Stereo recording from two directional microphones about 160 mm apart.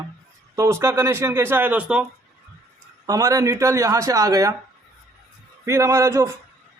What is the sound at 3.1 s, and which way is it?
Speech, 20° right (ahead or behind).